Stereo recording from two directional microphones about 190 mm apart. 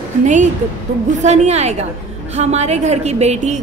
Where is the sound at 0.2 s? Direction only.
40° right (ahead or behind).